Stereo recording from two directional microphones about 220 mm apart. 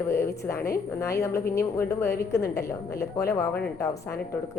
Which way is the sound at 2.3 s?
45° left (ahead or behind).